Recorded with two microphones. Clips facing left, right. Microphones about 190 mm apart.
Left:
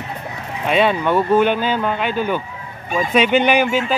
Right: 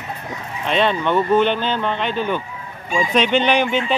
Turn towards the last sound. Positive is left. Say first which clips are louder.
# left 1 dB
turn(degrees=5)  # may be behind; listen again after turning